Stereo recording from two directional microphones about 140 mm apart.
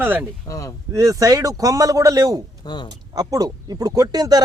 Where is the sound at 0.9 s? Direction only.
25° right (ahead or behind).